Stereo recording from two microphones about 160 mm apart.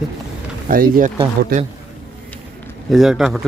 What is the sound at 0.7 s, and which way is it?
Speech, 60° right (ahead or behind).